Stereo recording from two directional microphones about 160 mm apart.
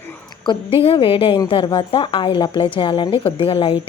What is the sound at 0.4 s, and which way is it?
A woman's voice, 35° left (ahead or behind).